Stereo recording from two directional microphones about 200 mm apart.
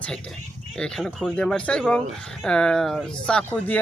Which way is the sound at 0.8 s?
5° left (ahead or behind).